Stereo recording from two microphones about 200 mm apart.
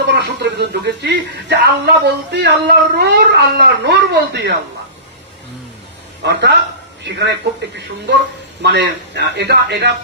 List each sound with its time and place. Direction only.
0.0 s speech: 55° right (ahead or behind)
6.2 s speech: 60° right (ahead or behind)
8.6 s speech: 60° right (ahead or behind)